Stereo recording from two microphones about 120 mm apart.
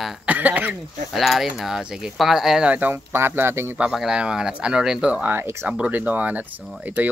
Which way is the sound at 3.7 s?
5° right (ahead or behind).